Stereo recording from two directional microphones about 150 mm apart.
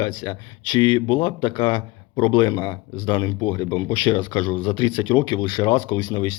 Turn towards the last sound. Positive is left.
turn(degrees=30)  # may be behind; listen again after turning